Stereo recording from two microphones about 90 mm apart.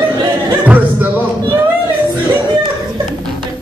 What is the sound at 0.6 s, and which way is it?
Music, 20° right (ahead or behind).